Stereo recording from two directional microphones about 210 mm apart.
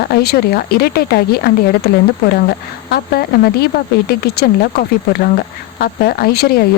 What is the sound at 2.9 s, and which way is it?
Speech, 45° left (ahead or behind).